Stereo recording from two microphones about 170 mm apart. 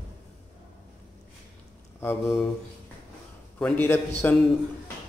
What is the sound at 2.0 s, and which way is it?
Speech, 10° left (ahead or behind).